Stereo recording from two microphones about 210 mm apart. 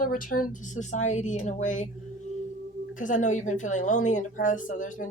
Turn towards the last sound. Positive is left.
turn(degrees=40)  # may be behind; listen again after turning